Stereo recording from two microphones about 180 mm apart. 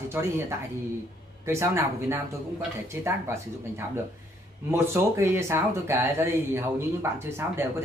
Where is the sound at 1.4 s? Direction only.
15° right (ahead or behind).